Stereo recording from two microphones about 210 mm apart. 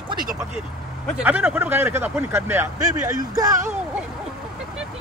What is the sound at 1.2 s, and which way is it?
Speech, 5° right (ahead or behind).